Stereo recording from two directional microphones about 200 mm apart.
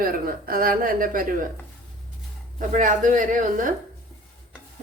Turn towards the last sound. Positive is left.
turn(degrees=-40)  # may be behind; listen again after turning